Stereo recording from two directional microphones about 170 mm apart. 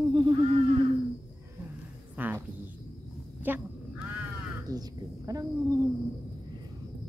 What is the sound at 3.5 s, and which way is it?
Speech, 10° right (ahead or behind).